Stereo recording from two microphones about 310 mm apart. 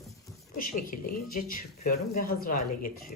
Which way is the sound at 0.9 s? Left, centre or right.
Left.